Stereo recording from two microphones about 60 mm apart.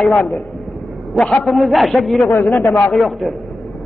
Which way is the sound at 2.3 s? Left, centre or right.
Left.